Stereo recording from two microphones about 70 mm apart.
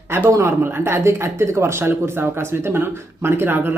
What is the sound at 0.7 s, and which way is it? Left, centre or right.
Speech, right.